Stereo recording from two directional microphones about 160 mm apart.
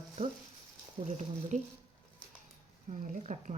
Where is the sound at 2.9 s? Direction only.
50° right (ahead or behind).